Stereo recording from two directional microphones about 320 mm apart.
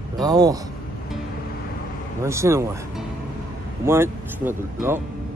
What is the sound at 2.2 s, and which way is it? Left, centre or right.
Speech, centre.